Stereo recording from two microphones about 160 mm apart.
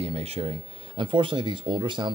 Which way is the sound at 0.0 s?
40° right (ahead or behind).